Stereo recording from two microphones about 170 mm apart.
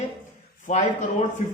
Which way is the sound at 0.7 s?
45° left (ahead or behind).